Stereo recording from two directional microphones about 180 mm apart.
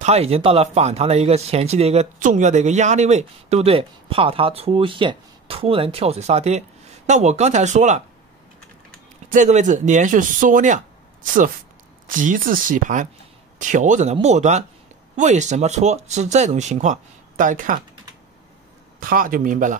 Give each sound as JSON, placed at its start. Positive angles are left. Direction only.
{"t": 0.0, "sound": "speech", "side_deg": -35}
{"t": 9.3, "sound": "speech", "side_deg": -40}
{"t": 12.1, "sound": "speech", "side_deg": -50}
{"t": 18.9, "sound": "speech", "side_deg": -50}